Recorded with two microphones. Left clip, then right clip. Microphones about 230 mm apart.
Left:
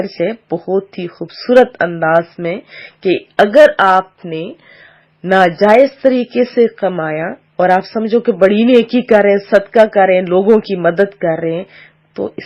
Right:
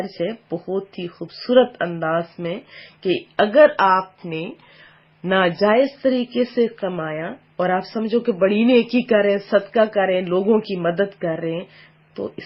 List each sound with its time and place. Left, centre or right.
0.2 s speech: left